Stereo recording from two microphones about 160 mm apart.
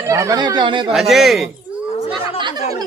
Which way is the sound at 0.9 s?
Centre (ahead or behind).